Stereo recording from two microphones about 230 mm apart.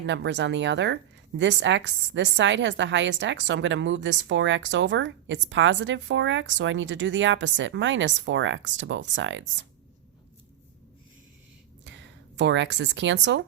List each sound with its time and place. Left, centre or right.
0.0 s a woman's voice: right
12.4 s a woman's voice: right